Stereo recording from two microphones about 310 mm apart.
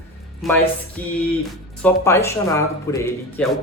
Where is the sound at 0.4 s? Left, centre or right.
Centre.